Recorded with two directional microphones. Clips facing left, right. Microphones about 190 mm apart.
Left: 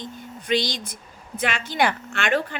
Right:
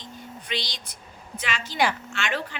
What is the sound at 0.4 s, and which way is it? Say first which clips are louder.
A woman's voice: left 11 dB; 45° left (ahead or behind).